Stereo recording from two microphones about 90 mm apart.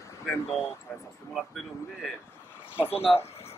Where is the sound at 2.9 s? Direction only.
90° left.